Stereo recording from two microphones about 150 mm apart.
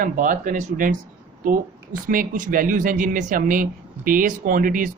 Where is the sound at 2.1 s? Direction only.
65° right (ahead or behind).